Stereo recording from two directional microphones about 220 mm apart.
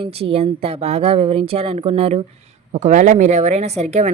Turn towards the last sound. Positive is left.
turn(degrees=-30)  # may be behind; listen again after turning